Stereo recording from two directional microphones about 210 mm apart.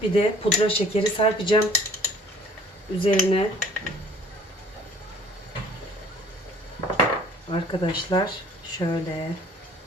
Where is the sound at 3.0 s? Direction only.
25° left (ahead or behind).